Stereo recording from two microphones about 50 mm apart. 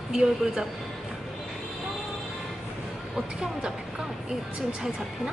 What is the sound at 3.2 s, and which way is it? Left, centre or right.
Speech, centre.